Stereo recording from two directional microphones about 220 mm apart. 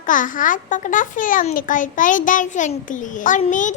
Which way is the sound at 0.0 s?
35° left (ahead or behind).